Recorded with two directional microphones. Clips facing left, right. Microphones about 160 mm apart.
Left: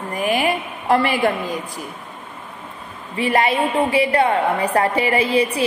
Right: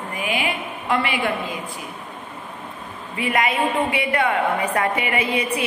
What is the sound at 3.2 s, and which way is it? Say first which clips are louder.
A woman's voice: left 3 dB; 30° left (ahead or behind).